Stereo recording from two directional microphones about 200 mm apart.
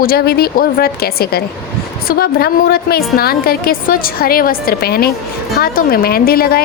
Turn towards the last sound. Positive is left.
turn(degrees=50)  # may be behind; listen again after turning